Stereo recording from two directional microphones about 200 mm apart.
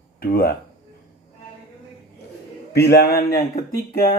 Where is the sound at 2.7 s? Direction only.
55° left (ahead or behind).